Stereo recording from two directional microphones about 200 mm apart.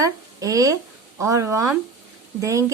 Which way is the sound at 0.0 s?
15° right (ahead or behind).